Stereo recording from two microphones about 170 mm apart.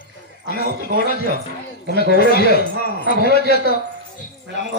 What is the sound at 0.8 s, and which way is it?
Speech, 65° right (ahead or behind).